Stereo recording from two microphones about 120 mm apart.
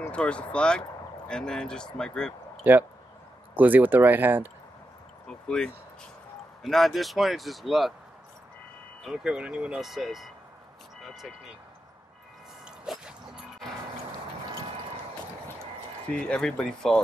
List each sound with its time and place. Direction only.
0.1 s speech: 10° left (ahead or behind)
2.6 s speech: 15° right (ahead or behind)
5.3 s speech: 5° left (ahead or behind)
9.0 s speech: 5° right (ahead or behind)
11.1 s vehicle: centre (ahead or behind)
12.6 s a sound: 5° right (ahead or behind)
16.2 s speech: 5° left (ahead or behind)